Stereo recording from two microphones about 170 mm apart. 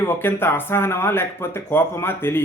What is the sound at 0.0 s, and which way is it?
Speech, 15° left (ahead or behind).